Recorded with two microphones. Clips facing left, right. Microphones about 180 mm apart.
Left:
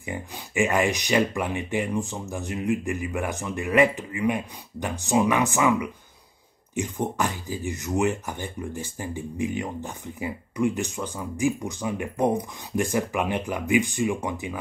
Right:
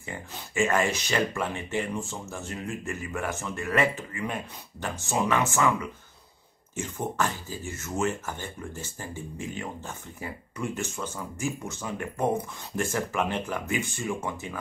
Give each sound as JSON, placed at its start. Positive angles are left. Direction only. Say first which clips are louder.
{"t": 0.0, "sound": "speech", "louder": "left 5 dB", "side_deg": 15}